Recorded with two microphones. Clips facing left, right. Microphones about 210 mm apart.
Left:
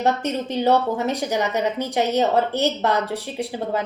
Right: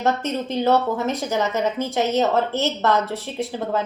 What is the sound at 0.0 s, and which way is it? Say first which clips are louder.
A woman's voice: left 1 dB; 15° left (ahead or behind).